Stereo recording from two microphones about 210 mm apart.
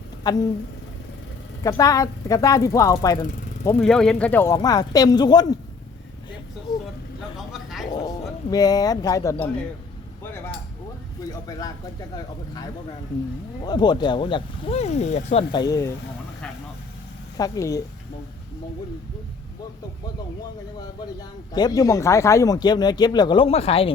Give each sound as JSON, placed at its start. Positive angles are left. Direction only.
{"t": 0.2, "sound": "speech", "side_deg": 20}
{"t": 1.6, "sound": "speech", "side_deg": 15}
{"t": 3.2, "sound": "jackhammer", "side_deg": 40}
{"t": 3.8, "sound": "speech", "side_deg": 5}
{"t": 7.3, "sound": "a sound", "side_deg": 0}
{"t": 7.9, "sound": "speech", "side_deg": 15}
{"t": 10.2, "sound": "a sound", "side_deg": 10}
{"t": 11.2, "sound": "speech", "side_deg": 15}
{"t": 13.7, "sound": "speech", "side_deg": 20}
{"t": 15.5, "sound": "speech", "side_deg": 15}
{"t": 17.3, "sound": "speech", "side_deg": 15}
{"t": 21.2, "sound": "speech", "side_deg": 20}